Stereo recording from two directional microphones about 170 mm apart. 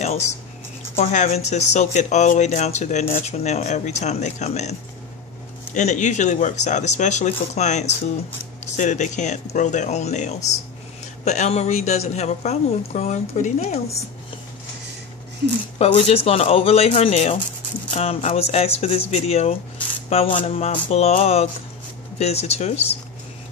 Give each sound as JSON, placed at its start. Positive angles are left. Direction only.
{"t": 0.9, "sound": "speech", "side_deg": 45}
{"t": 5.8, "sound": "a woman's voice", "side_deg": 45}
{"t": 15.8, "sound": "a woman's voice", "side_deg": 35}